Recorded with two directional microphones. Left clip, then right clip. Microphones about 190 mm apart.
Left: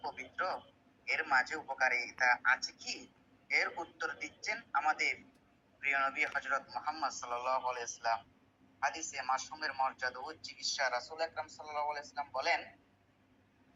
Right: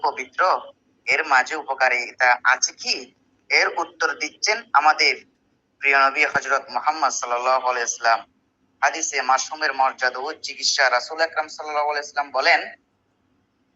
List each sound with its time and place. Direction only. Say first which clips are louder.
0.0 s a man's voice: right 18 dB; 50° right (ahead or behind)